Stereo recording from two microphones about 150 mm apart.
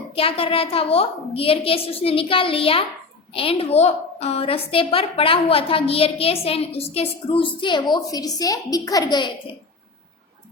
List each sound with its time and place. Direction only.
0.1 s a woman's voice: 40° left (ahead or behind)